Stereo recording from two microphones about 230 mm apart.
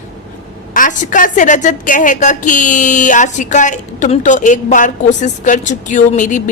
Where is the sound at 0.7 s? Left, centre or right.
Left.